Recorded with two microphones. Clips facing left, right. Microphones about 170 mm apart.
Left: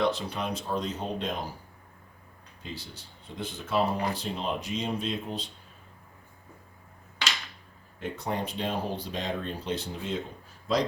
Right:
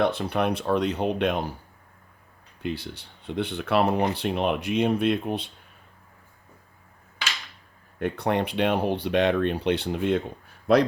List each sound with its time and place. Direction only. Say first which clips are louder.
0.0 s speech: right 5 dB; 60° right (ahead or behind)
2.6 s speech: right 10 dB; 65° right (ahead or behind)
7.9 s speech: right 7 dB; 60° right (ahead or behind)